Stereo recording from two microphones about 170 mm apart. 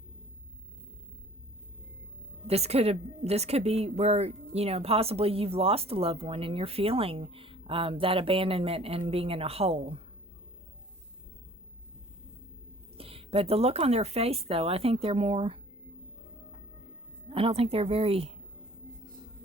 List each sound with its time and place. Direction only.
2.5 s a woman's voice: 35° right (ahead or behind)
13.0 s a woman's voice: 35° right (ahead or behind)
17.2 s a woman's voice: 30° right (ahead or behind)